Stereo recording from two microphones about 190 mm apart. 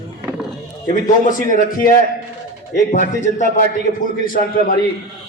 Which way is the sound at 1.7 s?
50° left (ahead or behind).